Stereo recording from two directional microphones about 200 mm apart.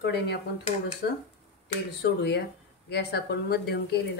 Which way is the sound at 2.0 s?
55° left (ahead or behind).